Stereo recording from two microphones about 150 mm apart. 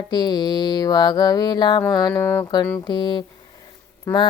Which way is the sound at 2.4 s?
30° left (ahead or behind).